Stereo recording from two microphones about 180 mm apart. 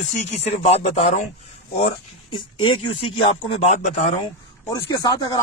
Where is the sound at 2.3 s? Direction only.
25° left (ahead or behind).